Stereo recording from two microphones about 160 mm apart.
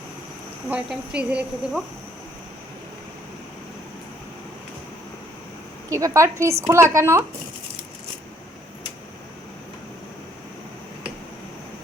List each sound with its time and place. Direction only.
0.7 s a woman's voice: 5° right (ahead or behind)
5.9 s a woman's voice: 20° right (ahead or behind)